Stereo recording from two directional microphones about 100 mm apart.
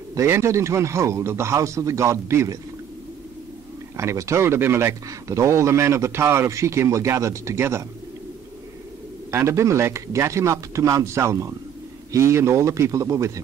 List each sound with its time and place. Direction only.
0.1 s speech: 30° right (ahead or behind)
3.9 s speech: 30° right (ahead or behind)
9.3 s speech: 25° right (ahead or behind)